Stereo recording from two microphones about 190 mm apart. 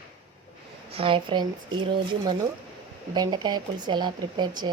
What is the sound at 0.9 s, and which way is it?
Speech, 30° right (ahead or behind).